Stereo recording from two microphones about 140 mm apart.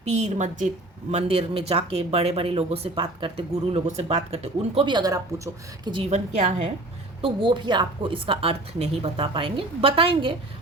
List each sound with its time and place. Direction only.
0.0 s a woman's voice: 55° right (ahead or behind)
1.1 s a woman's voice: 45° right (ahead or behind)
6.1 s speech: 50° right (ahead or behind)
7.2 s a woman's voice: 40° right (ahead or behind)